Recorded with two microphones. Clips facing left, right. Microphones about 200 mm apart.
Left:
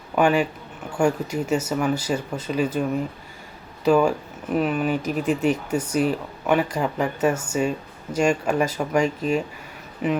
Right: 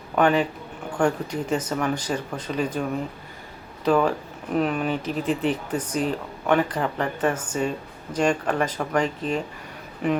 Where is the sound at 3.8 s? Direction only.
10° left (ahead or behind).